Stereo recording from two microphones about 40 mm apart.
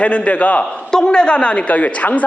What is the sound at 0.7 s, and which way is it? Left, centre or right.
A man's voice, centre.